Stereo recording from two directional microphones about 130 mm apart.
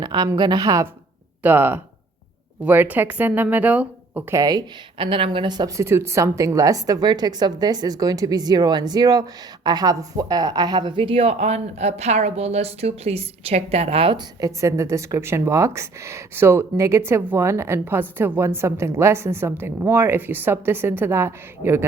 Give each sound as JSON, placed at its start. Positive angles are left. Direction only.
{"t": 0.0, "sound": "a woman's voice", "side_deg": -35}
{"t": 1.4, "sound": "speech", "side_deg": -15}
{"t": 4.4, "sound": "speech", "side_deg": -30}
{"t": 4.9, "sound": "a woman's voice", "side_deg": -45}
{"t": 14.2, "sound": "speech", "side_deg": -25}